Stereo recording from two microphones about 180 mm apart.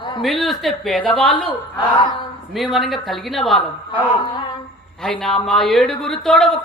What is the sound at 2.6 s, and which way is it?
A woman's voice, centre (ahead or behind).